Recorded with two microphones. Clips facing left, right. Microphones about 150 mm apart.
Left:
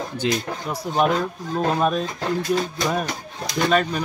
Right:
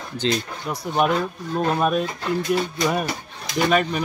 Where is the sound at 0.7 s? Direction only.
5° right (ahead or behind).